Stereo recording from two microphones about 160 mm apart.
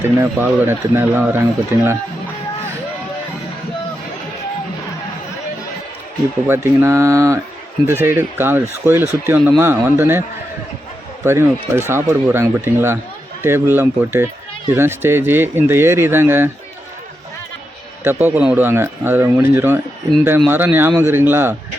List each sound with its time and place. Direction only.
0.0 s speech: 15° right (ahead or behind)
6.5 s speech: 15° right (ahead or behind)
18.0 s speech: 15° right (ahead or behind)